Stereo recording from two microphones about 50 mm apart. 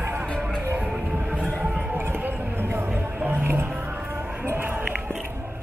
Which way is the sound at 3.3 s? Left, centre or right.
Right.